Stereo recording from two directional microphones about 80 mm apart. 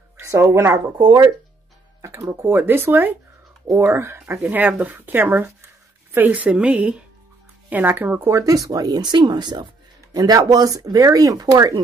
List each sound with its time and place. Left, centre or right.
0.2 s a woman's voice: right
1.0 s speech: right
2.0 s music: right
2.4 s speech: right
3.6 s a woman's voice: right
8.3 s speech: right
10.1 s speech: right